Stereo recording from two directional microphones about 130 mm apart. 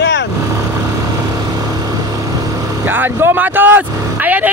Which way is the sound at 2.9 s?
15° right (ahead or behind).